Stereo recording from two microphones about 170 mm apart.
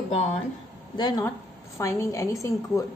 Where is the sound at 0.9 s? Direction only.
25° left (ahead or behind).